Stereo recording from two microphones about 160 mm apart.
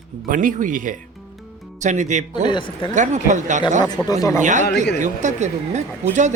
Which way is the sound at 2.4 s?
30° left (ahead or behind).